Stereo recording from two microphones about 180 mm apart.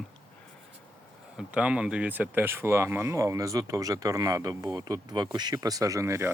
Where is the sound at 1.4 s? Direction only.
5° right (ahead or behind).